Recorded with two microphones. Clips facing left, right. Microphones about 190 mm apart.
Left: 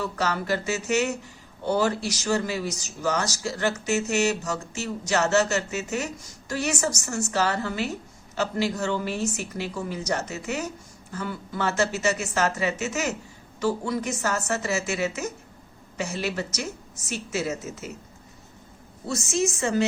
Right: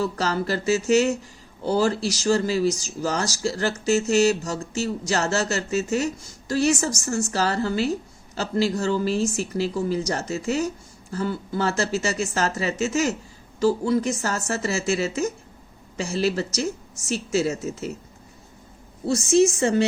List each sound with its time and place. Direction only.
0.0 s speech: 35° right (ahead or behind)
19.0 s speech: 30° right (ahead or behind)